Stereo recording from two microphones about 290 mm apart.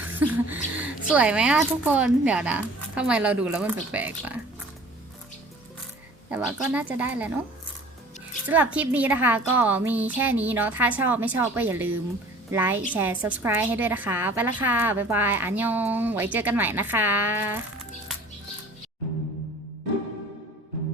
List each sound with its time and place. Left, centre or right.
0.2 s speech: centre
6.3 s speech: centre
8.4 s a woman's voice: centre